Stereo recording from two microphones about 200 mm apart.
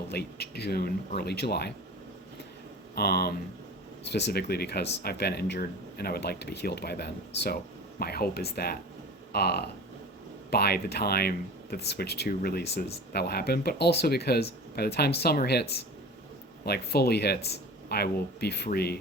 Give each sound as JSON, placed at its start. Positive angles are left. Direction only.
{"t": 0.1, "sound": "speech", "side_deg": 55}
{"t": 2.9, "sound": "speech", "side_deg": 50}